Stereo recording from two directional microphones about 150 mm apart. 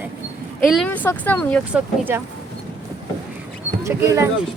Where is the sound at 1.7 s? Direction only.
15° right (ahead or behind).